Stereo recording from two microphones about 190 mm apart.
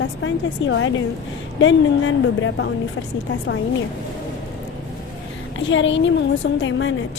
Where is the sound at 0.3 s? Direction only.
85° left.